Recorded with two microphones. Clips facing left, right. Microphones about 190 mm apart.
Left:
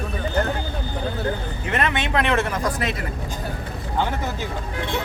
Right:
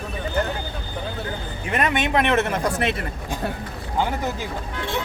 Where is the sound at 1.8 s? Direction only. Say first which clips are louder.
Right 2 dB; 15° right (ahead or behind).